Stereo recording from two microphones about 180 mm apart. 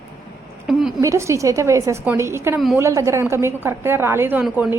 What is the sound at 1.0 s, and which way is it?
A woman's voice, 15° right (ahead or behind).